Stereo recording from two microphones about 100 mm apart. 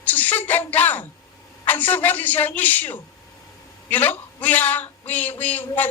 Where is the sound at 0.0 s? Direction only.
15° left (ahead or behind).